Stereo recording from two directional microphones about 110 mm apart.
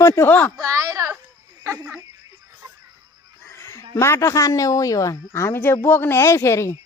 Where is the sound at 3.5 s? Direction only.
25° left (ahead or behind).